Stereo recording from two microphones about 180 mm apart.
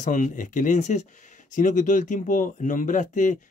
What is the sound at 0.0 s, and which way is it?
Speech, 45° left (ahead or behind).